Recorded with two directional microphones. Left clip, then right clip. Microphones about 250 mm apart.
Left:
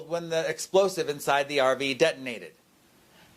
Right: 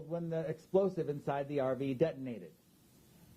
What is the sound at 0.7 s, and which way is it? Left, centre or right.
Speech, left.